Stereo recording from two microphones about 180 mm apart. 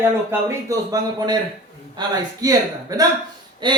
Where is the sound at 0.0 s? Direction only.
15° right (ahead or behind).